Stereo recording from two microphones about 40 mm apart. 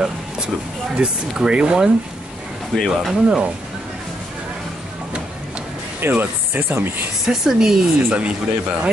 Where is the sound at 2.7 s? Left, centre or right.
Centre.